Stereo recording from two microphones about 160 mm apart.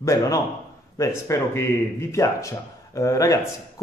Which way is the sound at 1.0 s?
15° left (ahead or behind).